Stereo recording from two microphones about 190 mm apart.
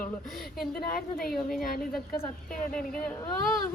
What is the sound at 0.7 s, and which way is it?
Speech, 50° left (ahead or behind).